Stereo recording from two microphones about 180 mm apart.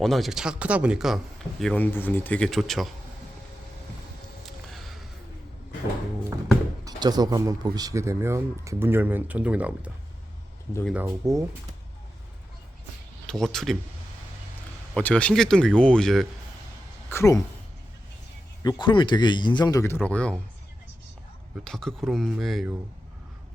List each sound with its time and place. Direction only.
0.0 s speech: centre (ahead or behind)
4.4 s a sound: centre (ahead or behind)
6.8 s speech: 20° right (ahead or behind)
10.9 s speech: 15° right (ahead or behind)
13.2 s speech: centre (ahead or behind)
14.9 s speech: 5° left (ahead or behind)
17.1 s speech: 15° left (ahead or behind)
18.6 s speech: 25° left (ahead or behind); by 20.4 s 5° left (ahead or behind)
21.5 s speech: 5° left (ahead or behind)